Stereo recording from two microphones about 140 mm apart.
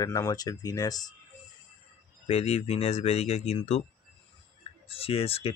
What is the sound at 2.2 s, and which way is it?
Speech, 45° left (ahead or behind).